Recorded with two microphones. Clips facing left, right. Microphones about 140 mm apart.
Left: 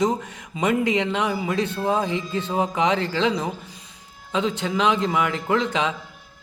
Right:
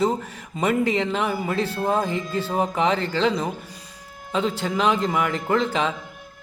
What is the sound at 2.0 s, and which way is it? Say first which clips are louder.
Music: even; 45° right (ahead or behind).